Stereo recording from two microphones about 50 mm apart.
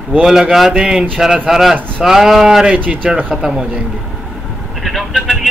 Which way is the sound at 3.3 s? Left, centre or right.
Centre.